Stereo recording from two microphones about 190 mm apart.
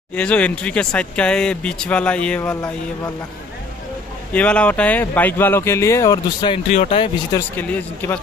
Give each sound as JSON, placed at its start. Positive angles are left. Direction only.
{"t": 0.1, "sound": "speech", "side_deg": 5}
{"t": 4.3, "sound": "speech", "side_deg": 5}
{"t": 7.3, "sound": "speech", "side_deg": 10}